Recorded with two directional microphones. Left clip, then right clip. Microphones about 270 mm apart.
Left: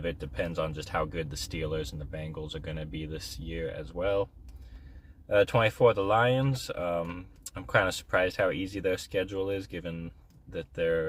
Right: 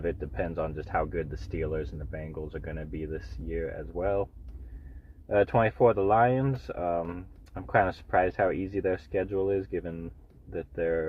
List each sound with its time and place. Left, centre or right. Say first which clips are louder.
0.0 s speech: right 1 dB; centre
5.3 s speech: even; centre